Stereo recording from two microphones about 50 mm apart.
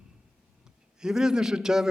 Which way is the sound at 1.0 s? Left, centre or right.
Centre.